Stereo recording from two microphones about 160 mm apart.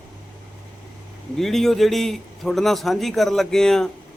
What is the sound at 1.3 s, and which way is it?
A man's voice, centre (ahead or behind).